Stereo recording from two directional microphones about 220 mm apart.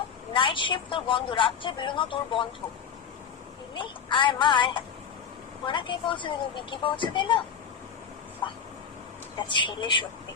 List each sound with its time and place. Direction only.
0.3 s a woman's voice: 20° left (ahead or behind)
3.8 s a woman's voice: 20° left (ahead or behind)
9.5 s a woman's voice: 20° left (ahead or behind)